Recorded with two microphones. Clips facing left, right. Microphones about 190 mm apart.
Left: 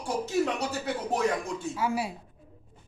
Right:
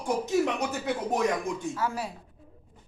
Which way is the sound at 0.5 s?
20° right (ahead or behind).